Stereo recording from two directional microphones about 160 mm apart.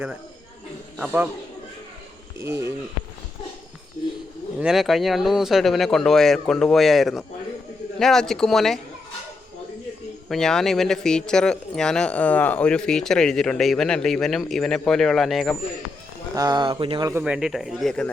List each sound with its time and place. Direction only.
0.9 s a man's voice: 10° right (ahead or behind)
2.4 s speech: 20° right (ahead or behind)
4.6 s speech: centre (ahead or behind)
10.2 s speech: 5° left (ahead or behind)
16.3 s speech: 25° right (ahead or behind)
17.2 s speech: 5° right (ahead or behind)